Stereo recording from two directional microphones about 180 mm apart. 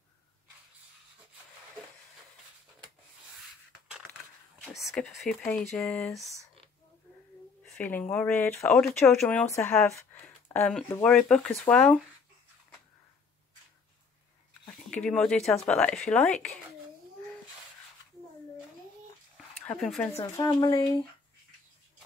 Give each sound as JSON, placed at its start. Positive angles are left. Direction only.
{"t": 4.6, "sound": "a sound", "side_deg": 0}
{"t": 5.0, "sound": "speech", "side_deg": 5}
{"t": 7.6, "sound": "speech", "side_deg": 5}
{"t": 14.7, "sound": "speech", "side_deg": 5}
{"t": 19.3, "sound": "a sound", "side_deg": 5}
{"t": 20.3, "sound": "speech", "side_deg": 20}